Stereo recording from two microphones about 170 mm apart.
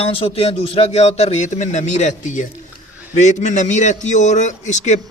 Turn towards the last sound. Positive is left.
turn(degrees=45)  # may be behind; listen again after turning